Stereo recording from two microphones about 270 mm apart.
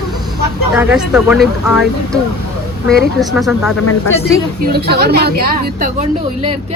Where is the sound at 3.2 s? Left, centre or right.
Centre.